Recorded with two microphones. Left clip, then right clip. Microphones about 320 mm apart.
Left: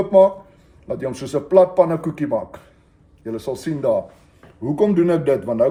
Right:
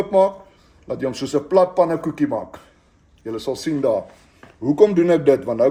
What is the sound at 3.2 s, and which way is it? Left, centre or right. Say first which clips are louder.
A man's voice: right 1 dB; right.